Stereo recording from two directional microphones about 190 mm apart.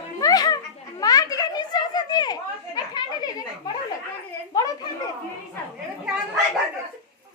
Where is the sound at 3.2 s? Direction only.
20° left (ahead or behind).